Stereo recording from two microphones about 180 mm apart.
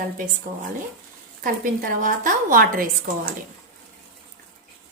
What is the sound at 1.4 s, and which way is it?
A woman's voice, 50° right (ahead or behind).